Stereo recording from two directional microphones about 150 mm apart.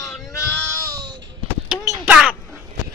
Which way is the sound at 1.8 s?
20° right (ahead or behind).